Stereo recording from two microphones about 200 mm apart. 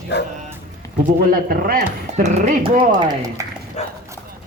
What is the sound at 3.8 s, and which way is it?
Horse, 35° left (ahead or behind).